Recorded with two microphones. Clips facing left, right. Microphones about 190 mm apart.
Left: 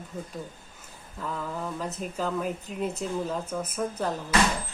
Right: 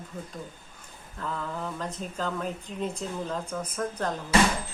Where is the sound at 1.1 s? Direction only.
5° left (ahead or behind).